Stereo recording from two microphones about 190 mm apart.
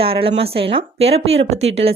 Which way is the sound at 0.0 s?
30° right (ahead or behind).